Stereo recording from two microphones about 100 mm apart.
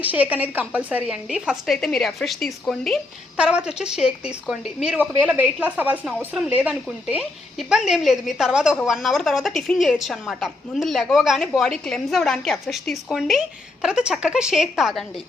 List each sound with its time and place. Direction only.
0.0 s speech: 15° right (ahead or behind)
1.6 s a woman's voice: centre (ahead or behind)
3.3 s speech: 10° right (ahead or behind)
6.1 s a woman's voice: 5° right (ahead or behind)